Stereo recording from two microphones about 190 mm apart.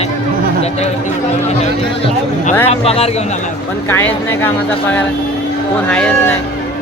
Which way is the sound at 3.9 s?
10° left (ahead or behind).